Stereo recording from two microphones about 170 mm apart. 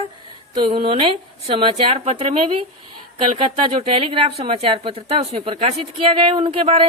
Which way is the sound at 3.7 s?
35° right (ahead or behind).